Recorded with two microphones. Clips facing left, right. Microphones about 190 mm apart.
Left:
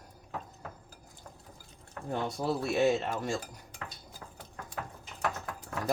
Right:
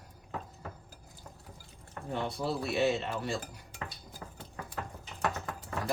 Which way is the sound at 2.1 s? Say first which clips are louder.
Left 2 dB; 45° left (ahead or behind).